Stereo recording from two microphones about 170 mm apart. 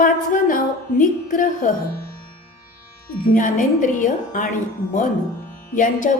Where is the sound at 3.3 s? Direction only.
50° left (ahead or behind).